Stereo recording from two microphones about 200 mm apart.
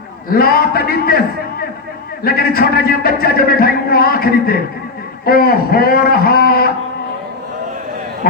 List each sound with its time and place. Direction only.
0.3 s speech: 50° left (ahead or behind)